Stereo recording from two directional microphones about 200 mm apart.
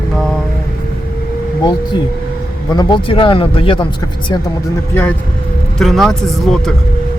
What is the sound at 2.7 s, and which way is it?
Speech, 20° left (ahead or behind).